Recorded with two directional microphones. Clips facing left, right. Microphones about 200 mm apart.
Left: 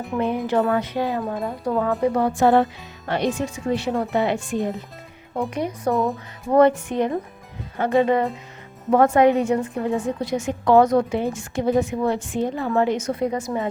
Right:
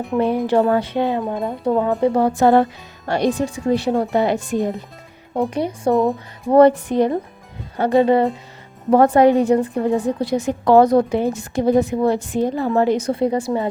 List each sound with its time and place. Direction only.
0.4 s a woman's voice: 30° right (ahead or behind)